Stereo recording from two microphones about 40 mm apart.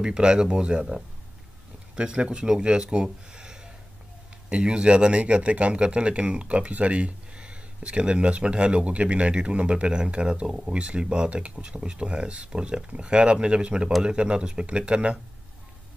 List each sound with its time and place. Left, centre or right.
0.0 s speech: right